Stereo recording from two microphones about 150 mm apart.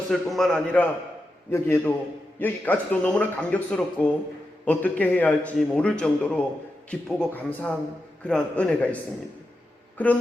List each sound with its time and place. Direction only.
0.1 s a man's voice: centre (ahead or behind)